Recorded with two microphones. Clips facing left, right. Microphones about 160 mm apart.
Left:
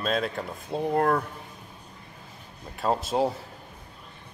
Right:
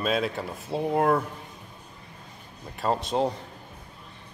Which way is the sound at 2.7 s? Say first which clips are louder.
Even; centre (ahead or behind).